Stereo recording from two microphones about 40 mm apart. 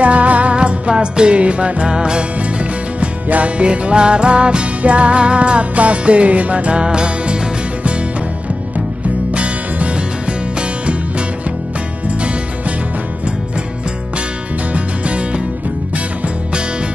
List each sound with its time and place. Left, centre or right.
0.0 s music: right
2.6 s music: right
8.7 s music: right
14.7 s music: right